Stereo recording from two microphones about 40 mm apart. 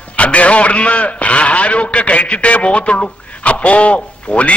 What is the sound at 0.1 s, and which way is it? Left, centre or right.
A man's voice, left.